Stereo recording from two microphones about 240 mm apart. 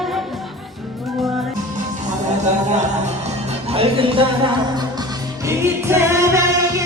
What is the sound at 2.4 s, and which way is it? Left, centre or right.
Music, right.